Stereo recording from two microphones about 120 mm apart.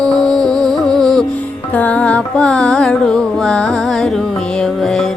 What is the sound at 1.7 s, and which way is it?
Music, 10° left (ahead or behind).